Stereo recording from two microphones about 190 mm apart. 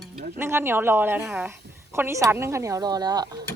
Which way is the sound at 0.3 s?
15° right (ahead or behind).